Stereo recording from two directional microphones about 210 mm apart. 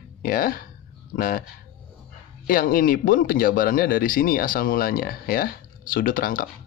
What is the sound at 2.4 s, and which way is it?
Speech, 40° left (ahead or behind).